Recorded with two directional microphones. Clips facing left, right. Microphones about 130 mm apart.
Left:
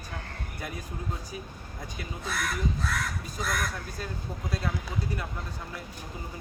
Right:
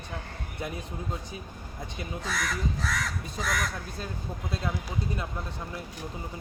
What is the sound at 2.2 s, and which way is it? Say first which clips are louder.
Crow: left 1 dB; 90° right.